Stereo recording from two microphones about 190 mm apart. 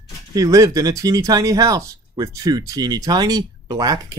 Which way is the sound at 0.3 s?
20° right (ahead or behind).